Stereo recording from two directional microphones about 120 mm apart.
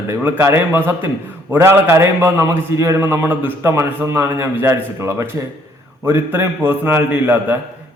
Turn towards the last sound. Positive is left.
turn(degrees=-15)  # may be behind; listen again after turning